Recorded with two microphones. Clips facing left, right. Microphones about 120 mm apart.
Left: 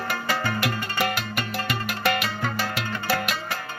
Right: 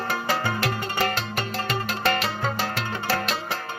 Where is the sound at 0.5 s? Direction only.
10° left (ahead or behind).